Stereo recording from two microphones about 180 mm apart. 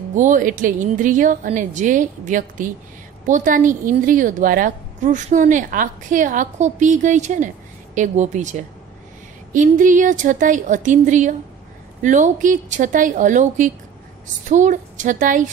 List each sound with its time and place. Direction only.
0.1 s a woman's voice: 45° right (ahead or behind)